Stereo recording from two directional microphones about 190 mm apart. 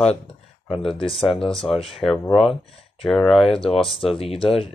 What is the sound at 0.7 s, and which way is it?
Speech, 30° left (ahead or behind).